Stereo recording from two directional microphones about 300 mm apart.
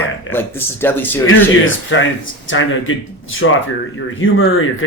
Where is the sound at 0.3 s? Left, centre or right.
Centre.